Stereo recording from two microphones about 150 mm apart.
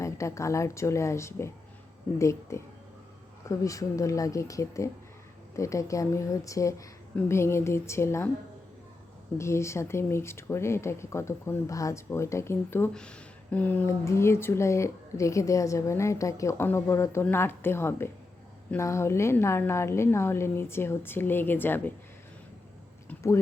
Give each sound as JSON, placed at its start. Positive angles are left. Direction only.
{"t": 0.0, "sound": "speech", "side_deg": 20}
{"t": 9.4, "sound": "speech", "side_deg": 20}
{"t": 23.0, "sound": "a sound", "side_deg": 20}